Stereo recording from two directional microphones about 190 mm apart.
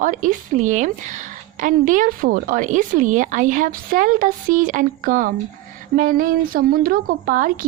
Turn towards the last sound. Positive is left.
turn(degrees=-45)  # may be behind; listen again after turning